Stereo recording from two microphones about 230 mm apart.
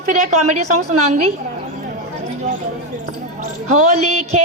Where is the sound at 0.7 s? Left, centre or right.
Right.